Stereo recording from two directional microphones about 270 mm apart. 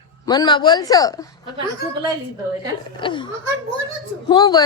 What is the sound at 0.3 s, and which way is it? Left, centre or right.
Speech, centre.